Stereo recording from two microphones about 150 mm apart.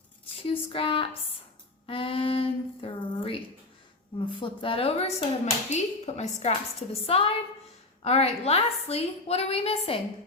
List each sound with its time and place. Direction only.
0.3 s a woman's voice: 35° left (ahead or behind)
1.9 s a sound: 35° left (ahead or behind)
4.3 s a woman's voice: 35° left (ahead or behind)